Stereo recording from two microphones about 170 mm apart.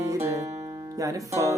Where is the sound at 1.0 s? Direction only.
20° right (ahead or behind).